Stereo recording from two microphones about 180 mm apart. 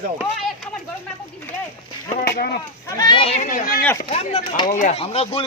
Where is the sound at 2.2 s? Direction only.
60° left (ahead or behind).